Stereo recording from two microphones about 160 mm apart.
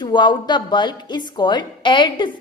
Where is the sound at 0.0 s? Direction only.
30° left (ahead or behind).